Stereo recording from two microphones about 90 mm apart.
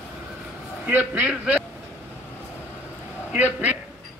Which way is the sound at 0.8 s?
15° right (ahead or behind).